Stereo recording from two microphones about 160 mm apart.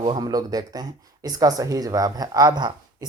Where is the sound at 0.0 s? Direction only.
25° right (ahead or behind).